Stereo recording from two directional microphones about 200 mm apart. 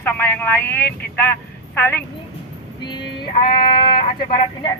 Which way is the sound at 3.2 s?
25° left (ahead or behind).